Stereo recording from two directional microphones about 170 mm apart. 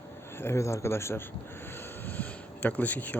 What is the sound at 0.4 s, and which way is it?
Speech, 15° left (ahead or behind).